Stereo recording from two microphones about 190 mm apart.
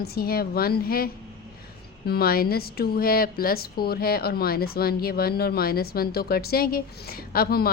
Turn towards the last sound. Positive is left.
turn(degrees=55)  # may be behind; listen again after turning